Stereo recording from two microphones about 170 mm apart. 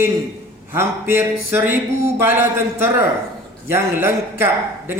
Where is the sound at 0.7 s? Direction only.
15° right (ahead or behind).